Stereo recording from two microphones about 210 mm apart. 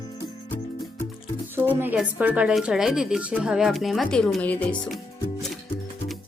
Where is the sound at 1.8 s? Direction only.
5° right (ahead or behind).